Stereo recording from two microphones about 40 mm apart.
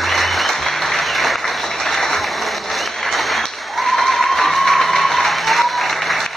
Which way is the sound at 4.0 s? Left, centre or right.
Centre.